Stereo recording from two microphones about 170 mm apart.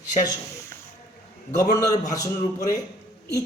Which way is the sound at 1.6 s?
20° left (ahead or behind).